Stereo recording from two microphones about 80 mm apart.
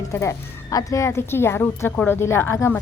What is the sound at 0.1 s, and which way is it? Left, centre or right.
A woman's voice, left.